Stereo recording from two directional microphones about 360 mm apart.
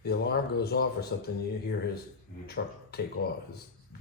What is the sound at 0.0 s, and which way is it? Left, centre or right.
Speech, left.